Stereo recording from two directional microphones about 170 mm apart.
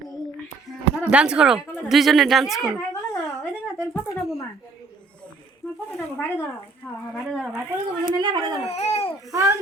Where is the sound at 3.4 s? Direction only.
5° left (ahead or behind).